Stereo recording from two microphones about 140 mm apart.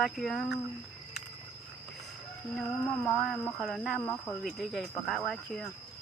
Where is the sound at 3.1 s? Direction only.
Centre (ahead or behind).